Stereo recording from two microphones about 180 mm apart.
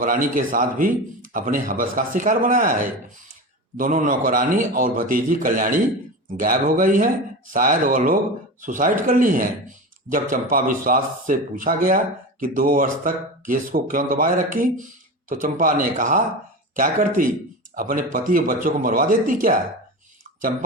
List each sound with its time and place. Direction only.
0.0 s speech: 50° right (ahead or behind)